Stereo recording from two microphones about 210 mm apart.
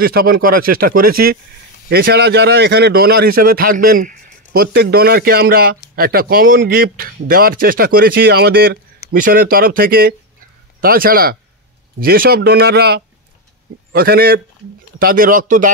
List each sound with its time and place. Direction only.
0.0 s speech: 45° right (ahead or behind)